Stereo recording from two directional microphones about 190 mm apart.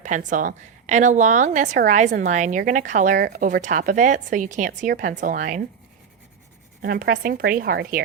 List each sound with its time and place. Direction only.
0.0 s a woman's voice: 40° right (ahead or behind)
6.8 s a woman's voice: 50° right (ahead or behind)